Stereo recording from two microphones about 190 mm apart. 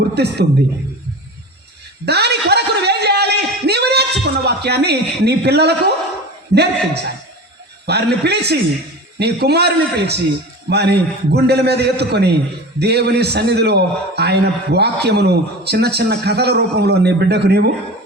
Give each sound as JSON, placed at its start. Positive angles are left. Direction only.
{"t": 0.1, "sound": "a man's voice", "side_deg": -60}
{"t": 2.0, "sound": "a sound", "side_deg": -60}
{"t": 6.5, "sound": "a man's voice", "side_deg": -60}